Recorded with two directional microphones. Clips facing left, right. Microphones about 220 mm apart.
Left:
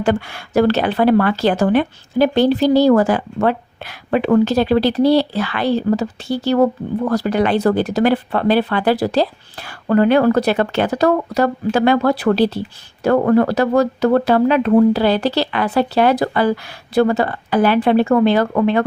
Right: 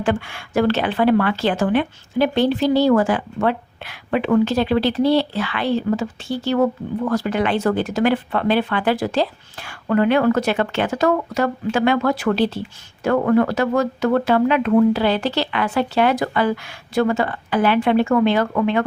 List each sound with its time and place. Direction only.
0.0 s a woman's voice: 40° left (ahead or behind)